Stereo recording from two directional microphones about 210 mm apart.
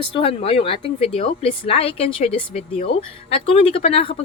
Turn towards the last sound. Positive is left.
turn(degrees=25)  # may be behind; listen again after turning